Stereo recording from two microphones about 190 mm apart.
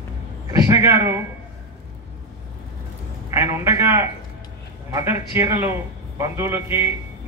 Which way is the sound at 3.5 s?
15° right (ahead or behind).